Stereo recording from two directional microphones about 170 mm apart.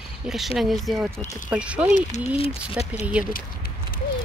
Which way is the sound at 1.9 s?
40° left (ahead or behind).